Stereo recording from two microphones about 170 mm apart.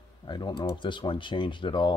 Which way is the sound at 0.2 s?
25° left (ahead or behind).